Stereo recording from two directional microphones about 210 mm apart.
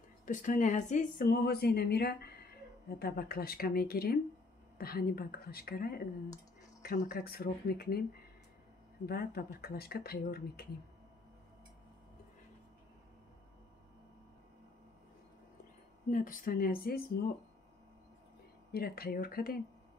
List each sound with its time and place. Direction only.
0.2 s speech: 40° left (ahead or behind)
9.0 s speech: 45° left (ahead or behind)
16.1 s speech: 40° left (ahead or behind)
18.7 s speech: 45° left (ahead or behind)